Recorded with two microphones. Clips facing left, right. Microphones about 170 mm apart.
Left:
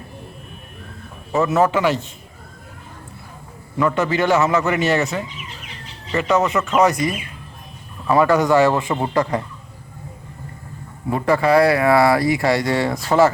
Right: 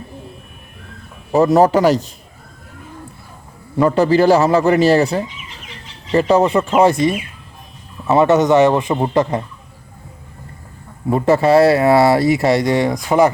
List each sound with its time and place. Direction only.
1.3 s a man's voice: 35° right (ahead or behind)
3.8 s a man's voice: 35° right (ahead or behind)
11.1 s speech: 25° right (ahead or behind)